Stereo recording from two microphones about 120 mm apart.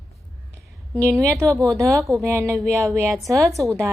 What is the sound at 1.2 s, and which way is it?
Speech, 25° right (ahead or behind).